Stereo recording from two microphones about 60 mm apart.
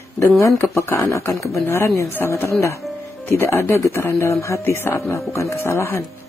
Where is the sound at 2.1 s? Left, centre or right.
Left.